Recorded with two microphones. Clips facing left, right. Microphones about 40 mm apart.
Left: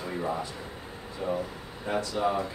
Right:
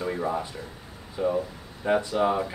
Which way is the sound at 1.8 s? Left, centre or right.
Right.